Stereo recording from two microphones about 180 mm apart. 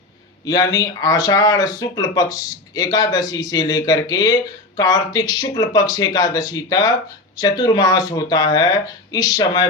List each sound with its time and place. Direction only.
0.4 s speech: 20° left (ahead or behind)